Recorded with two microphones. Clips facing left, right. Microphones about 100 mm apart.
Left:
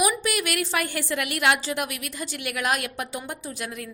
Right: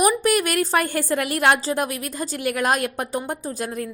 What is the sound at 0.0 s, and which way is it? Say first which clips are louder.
A woman's voice: right 6 dB; 45° right (ahead or behind).